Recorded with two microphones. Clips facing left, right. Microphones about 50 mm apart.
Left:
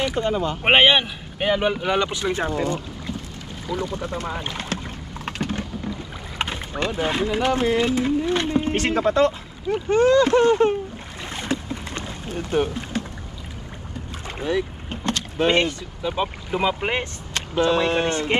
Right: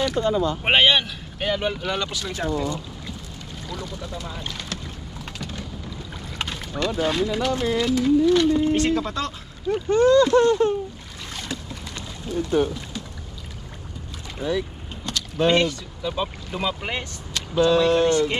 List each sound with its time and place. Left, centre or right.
0.3 s speech: left
0.7 s speech: left
3.6 s speech: centre
3.9 s speech: left
5.2 s typing: left
6.3 s speech: left
11.3 s boat: left
14.4 s boat: left
15.0 s speech: left